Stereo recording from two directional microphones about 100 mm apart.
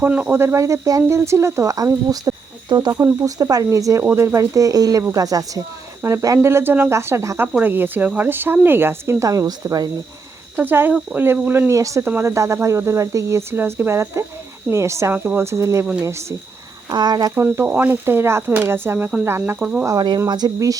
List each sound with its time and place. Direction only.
0.0 s speech: 20° right (ahead or behind); by 2.3 s 35° right (ahead or behind)
2.6 s speech: 45° right (ahead or behind)
2.9 s speech: 30° right (ahead or behind)
7.4 s speech: 15° right (ahead or behind); by 9.9 s 40° right (ahead or behind)
10.6 s speech: 20° right (ahead or behind)
11.7 s speech: 30° right (ahead or behind)
16.9 s speech: 45° right (ahead or behind)
17.3 s speech: 25° right (ahead or behind)
19.5 s speech: 10° right (ahead or behind)
20.0 s speech: 40° right (ahead or behind)